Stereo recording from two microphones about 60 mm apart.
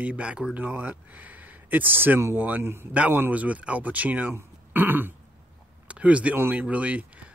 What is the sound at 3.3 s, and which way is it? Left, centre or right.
Speech, right.